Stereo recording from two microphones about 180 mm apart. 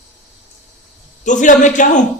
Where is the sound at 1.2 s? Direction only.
45° left (ahead or behind).